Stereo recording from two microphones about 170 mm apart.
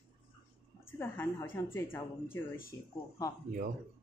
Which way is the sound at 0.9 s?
15° left (ahead or behind).